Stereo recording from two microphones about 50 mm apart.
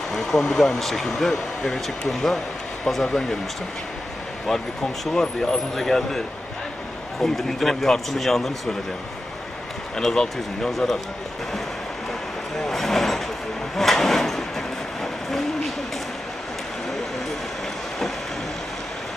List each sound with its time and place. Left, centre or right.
0.1 s speech: centre
5.0 s a man's voice: centre
9.9 s speech: centre
12.6 s vehicle: centre
13.7 s a sound: centre